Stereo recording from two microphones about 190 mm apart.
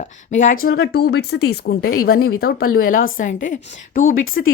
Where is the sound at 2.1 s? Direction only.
55° left (ahead or behind).